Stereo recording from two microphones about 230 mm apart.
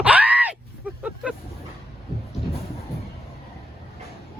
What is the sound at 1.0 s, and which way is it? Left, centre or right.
Vehicle, centre.